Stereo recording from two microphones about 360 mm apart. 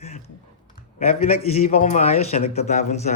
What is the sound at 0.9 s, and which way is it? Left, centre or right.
A man's voice, centre.